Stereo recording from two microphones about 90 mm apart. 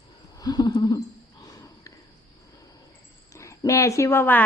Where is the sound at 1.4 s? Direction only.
40° left (ahead or behind).